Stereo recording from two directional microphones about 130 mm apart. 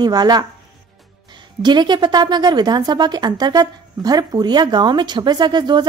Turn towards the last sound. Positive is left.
turn(degrees=-35)  # may be behind; listen again after turning